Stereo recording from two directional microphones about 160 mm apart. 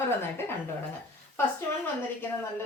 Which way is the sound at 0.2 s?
15° left (ahead or behind).